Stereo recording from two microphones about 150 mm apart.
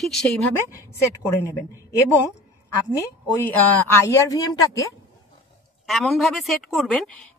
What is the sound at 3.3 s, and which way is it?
Speech, 10° left (ahead or behind).